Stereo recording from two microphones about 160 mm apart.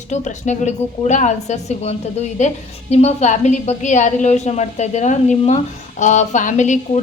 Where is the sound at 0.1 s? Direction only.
45° left (ahead or behind).